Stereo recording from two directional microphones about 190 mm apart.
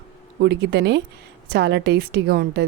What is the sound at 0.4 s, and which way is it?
A woman's voice, 60° right (ahead or behind).